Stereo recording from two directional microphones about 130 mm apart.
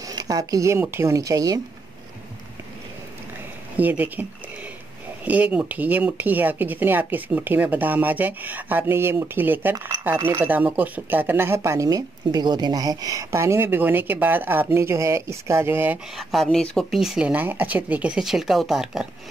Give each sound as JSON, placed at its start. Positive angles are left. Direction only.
{"t": 0.0, "sound": "speech", "side_deg": -30}
{"t": 3.7, "sound": "speech", "side_deg": -10}
{"t": 16.2, "sound": "speech", "side_deg": 0}